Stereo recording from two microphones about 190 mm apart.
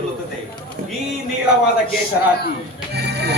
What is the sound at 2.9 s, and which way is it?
Music, 60° right (ahead or behind).